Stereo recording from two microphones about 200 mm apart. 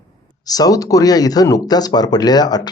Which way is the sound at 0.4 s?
20° left (ahead or behind).